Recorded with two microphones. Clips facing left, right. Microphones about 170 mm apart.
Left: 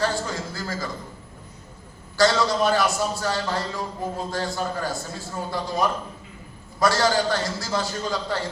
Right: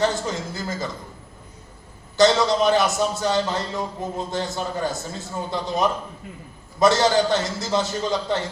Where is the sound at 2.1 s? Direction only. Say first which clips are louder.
Right 3 dB; 20° right (ahead or behind).